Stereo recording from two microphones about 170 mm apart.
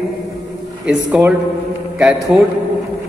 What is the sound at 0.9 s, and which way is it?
A man's voice, 10° right (ahead or behind).